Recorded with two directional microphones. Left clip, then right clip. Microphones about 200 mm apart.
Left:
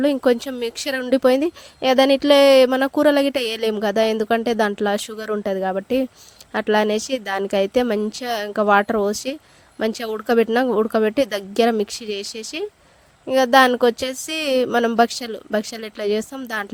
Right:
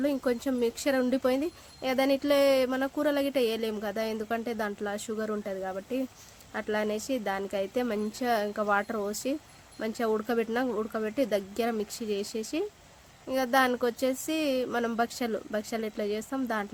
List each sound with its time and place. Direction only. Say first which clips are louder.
0.0 s speech: left 11 dB; 45° left (ahead or behind)